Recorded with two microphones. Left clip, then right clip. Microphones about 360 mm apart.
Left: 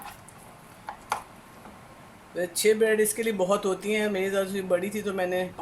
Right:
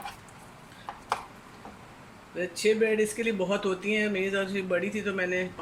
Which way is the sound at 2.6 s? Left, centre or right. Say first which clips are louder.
Left 3 dB; left.